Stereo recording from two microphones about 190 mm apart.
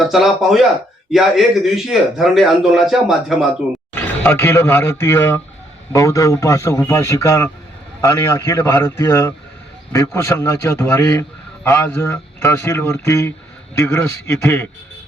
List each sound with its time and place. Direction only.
0.0 s a man's voice: centre (ahead or behind)
3.9 s a man's voice: 10° left (ahead or behind)